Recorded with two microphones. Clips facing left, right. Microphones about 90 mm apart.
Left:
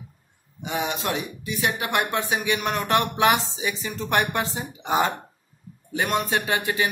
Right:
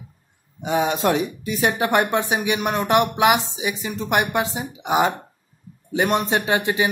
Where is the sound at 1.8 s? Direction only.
30° right (ahead or behind).